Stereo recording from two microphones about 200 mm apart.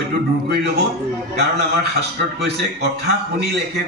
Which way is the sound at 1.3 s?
55° right (ahead or behind).